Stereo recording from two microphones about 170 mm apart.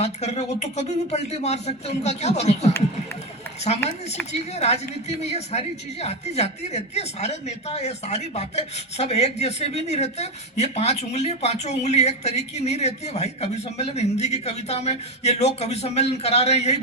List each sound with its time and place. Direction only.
0.0 s a woman's voice: 40° left (ahead or behind)
4.3 s a woman's voice: 40° left (ahead or behind)